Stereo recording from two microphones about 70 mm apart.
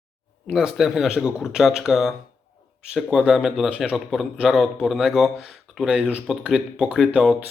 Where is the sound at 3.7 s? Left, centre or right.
Centre.